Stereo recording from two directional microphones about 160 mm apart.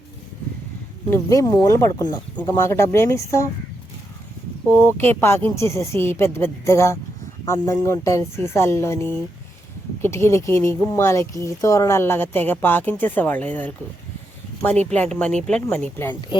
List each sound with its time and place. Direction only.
1.1 s speech: 20° left (ahead or behind)
4.7 s speech: 15° left (ahead or behind)